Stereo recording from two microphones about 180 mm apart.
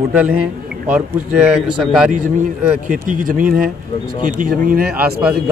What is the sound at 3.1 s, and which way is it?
Speech, 50° right (ahead or behind).